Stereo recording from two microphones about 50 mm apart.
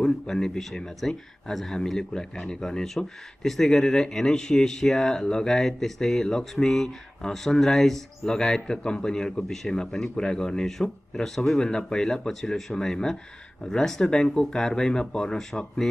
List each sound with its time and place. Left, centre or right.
0.0 s speech: centre